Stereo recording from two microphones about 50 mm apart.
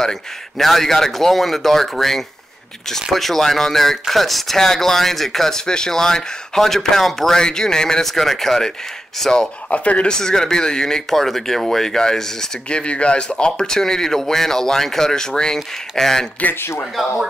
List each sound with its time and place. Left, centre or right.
0.0 s speech: centre
9.7 s speech: left
10.1 s speech: centre